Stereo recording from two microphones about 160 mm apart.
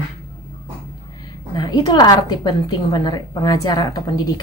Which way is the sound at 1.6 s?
25° left (ahead or behind).